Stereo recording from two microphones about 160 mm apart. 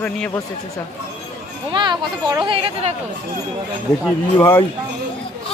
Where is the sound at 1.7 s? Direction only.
30° right (ahead or behind).